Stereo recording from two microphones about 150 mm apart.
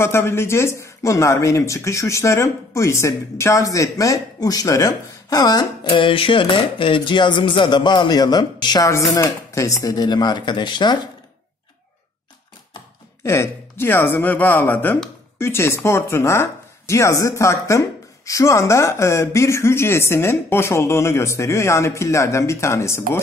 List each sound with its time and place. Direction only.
0.0 s speech: 15° left (ahead or behind)
13.2 s speech: 15° left (ahead or behind)